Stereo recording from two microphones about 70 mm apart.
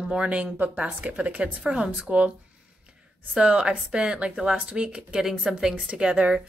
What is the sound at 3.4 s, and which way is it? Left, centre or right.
A woman's voice, centre.